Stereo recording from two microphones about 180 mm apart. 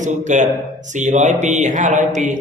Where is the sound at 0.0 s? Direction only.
45° right (ahead or behind).